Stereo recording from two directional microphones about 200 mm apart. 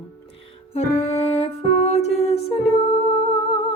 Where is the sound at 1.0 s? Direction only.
35° left (ahead or behind).